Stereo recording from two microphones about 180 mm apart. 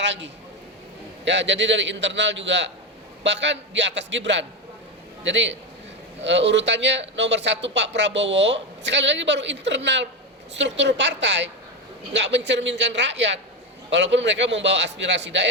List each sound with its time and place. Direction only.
0.0 s a man's voice: 75° right (ahead or behind)
6.2 s a man's voice: 80° right